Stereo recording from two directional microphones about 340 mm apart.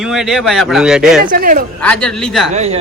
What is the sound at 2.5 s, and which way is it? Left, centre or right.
Speech, centre.